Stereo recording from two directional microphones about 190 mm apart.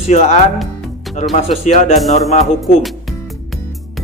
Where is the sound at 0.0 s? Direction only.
35° left (ahead or behind).